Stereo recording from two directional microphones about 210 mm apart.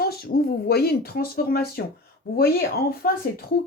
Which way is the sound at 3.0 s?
45° left (ahead or behind).